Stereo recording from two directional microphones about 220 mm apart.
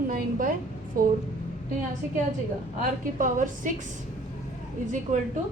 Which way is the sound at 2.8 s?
35° right (ahead or behind).